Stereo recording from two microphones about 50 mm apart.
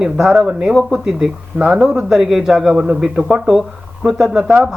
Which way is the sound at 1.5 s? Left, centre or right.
Right.